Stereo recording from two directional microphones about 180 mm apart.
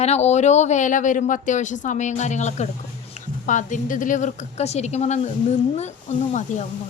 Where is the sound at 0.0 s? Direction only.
35° left (ahead or behind).